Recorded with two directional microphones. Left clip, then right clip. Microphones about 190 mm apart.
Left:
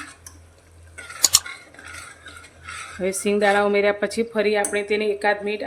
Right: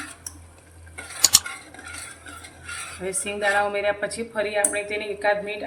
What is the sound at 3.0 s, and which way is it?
Speech, 50° left (ahead or behind).